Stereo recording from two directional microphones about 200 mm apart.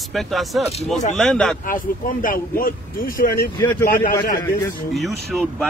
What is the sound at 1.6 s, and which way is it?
Speech, 45° left (ahead or behind).